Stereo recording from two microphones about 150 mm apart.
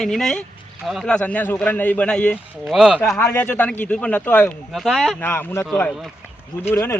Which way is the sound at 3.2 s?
15° left (ahead or behind).